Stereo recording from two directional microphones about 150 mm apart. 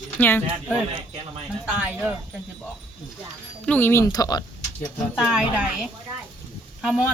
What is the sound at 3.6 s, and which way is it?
Speech, 10° left (ahead or behind).